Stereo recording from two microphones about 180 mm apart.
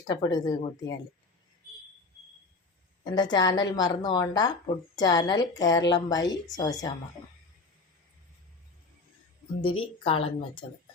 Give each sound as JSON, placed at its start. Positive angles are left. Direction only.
{"t": 0.1, "sound": "a woman's voice", "side_deg": 20}
{"t": 3.0, "sound": "a woman's voice", "side_deg": 25}
{"t": 9.6, "sound": "a woman's voice", "side_deg": 30}